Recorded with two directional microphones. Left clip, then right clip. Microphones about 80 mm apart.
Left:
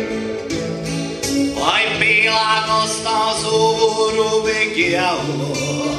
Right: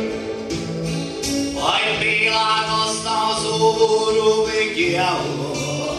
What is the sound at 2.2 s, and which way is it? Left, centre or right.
Music, left.